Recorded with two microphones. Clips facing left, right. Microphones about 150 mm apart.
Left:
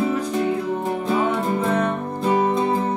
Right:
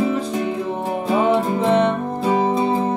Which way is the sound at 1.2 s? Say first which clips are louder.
Right 4 dB; 25° right (ahead or behind).